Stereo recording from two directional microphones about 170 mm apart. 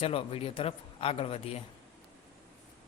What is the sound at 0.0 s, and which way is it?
A man's voice, 35° left (ahead or behind).